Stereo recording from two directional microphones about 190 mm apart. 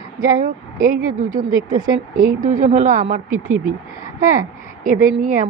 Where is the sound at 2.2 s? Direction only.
40° right (ahead or behind).